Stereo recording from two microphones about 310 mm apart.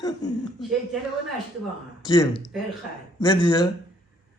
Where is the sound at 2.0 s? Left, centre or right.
Centre.